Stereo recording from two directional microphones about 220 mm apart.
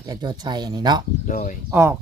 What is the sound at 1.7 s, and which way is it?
Speech, 10° right (ahead or behind).